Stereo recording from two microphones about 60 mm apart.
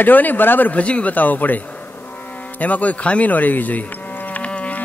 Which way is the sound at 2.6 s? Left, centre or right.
Left.